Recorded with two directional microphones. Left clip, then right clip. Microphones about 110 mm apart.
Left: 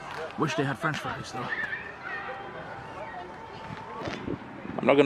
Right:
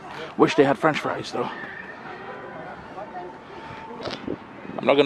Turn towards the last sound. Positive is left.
turn(degrees=0)  # may be behind; listen again after turning